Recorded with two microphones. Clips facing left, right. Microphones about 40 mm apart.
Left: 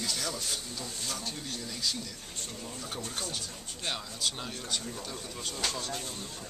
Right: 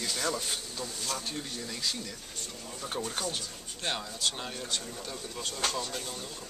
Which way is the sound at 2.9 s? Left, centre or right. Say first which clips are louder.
Right 5 dB; right.